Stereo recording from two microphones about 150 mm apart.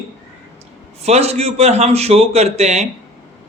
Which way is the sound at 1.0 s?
45° right (ahead or behind).